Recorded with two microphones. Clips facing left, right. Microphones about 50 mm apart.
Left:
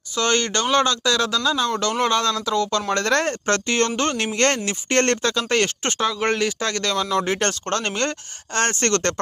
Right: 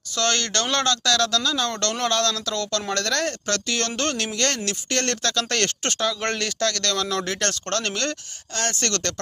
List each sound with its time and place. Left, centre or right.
0.2 s speech: centre
2.9 s speech: left
4.3 s speech: left; by 7.3 s centre
7.3 s speech: left